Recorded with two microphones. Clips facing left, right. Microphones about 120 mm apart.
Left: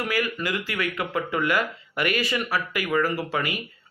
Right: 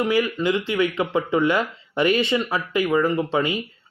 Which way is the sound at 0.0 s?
25° right (ahead or behind).